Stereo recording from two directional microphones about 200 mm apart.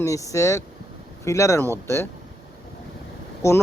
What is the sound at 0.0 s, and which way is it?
Speech, 15° left (ahead or behind).